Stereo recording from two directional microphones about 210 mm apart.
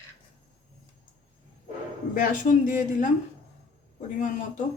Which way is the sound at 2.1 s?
40° left (ahead or behind).